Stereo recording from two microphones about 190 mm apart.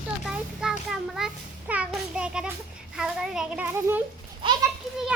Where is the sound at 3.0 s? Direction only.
5° right (ahead or behind).